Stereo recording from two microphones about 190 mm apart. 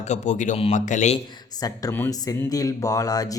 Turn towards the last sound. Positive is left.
turn(degrees=20)  # may be behind; listen again after turning